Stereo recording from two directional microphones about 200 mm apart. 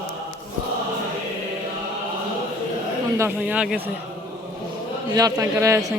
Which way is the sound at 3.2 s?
10° right (ahead or behind).